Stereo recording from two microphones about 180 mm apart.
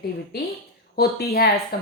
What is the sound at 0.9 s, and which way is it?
Speech, 60° left (ahead or behind).